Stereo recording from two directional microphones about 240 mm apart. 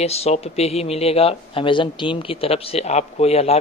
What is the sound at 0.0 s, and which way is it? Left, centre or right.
Speech, left.